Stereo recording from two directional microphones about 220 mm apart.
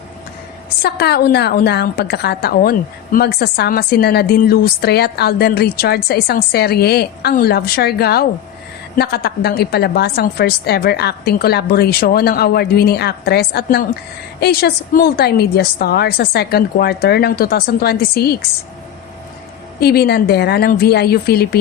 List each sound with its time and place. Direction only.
0.8 s a woman's voice: 45° left (ahead or behind)
19.8 s a woman's voice: 45° left (ahead or behind)